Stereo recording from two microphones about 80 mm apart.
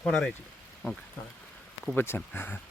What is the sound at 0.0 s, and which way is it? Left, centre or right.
Speech, centre.